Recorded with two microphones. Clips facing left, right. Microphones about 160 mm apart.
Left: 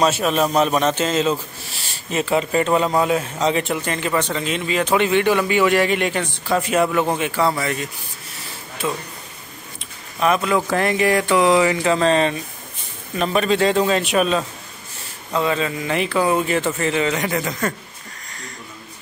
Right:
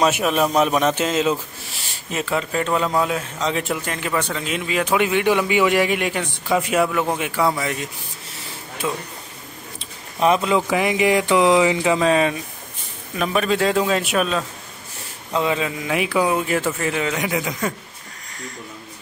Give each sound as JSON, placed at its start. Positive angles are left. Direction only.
{"t": 0.0, "sound": "speech", "side_deg": -10}
{"t": 2.3, "sound": "speech", "side_deg": 5}
{"t": 8.8, "sound": "speech", "side_deg": -5}
{"t": 10.2, "sound": "speech", "side_deg": -25}
{"t": 10.7, "sound": "speech", "side_deg": -10}
{"t": 15.3, "sound": "speech", "side_deg": -15}